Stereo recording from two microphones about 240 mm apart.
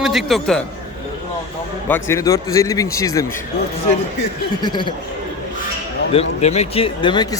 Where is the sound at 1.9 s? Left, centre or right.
Centre.